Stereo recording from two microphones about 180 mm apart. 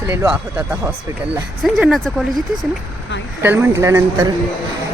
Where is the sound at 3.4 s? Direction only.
10° right (ahead or behind).